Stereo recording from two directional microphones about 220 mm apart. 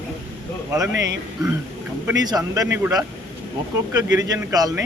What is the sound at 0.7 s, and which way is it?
Speech, 15° right (ahead or behind).